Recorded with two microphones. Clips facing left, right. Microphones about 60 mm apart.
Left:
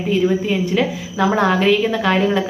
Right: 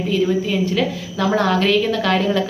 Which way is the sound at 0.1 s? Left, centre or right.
Left.